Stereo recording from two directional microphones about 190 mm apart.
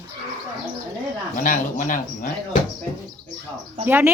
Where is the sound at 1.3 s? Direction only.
45° left (ahead or behind).